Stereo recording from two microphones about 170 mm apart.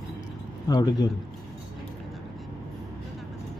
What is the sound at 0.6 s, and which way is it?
Speech, 25° left (ahead or behind).